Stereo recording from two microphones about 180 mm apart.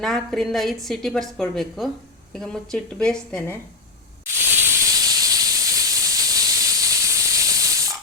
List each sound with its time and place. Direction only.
0.0 s a woman's voice: centre (ahead or behind)
4.3 s hiss: 15° right (ahead or behind)